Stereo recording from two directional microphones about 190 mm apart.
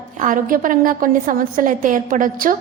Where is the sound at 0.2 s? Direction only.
45° right (ahead or behind).